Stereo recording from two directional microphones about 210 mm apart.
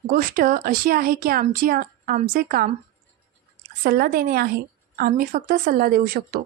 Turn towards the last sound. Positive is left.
turn(degrees=-45)  # may be behind; listen again after turning